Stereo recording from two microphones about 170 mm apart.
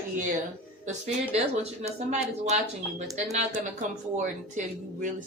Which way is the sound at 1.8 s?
40° right (ahead or behind).